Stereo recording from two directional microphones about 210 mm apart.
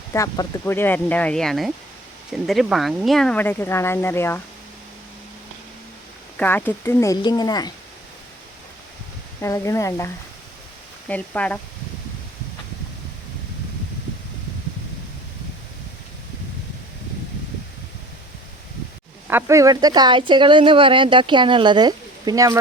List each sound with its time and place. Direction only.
0.1 s speech: 15° left (ahead or behind)
6.3 s speech: 10° left (ahead or behind)
9.4 s speech: 15° left (ahead or behind)
11.1 s speech: 5° left (ahead or behind)
19.3 s speech: 10° right (ahead or behind)